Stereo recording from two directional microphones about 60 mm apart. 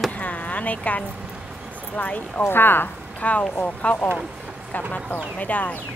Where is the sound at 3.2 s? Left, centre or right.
Left.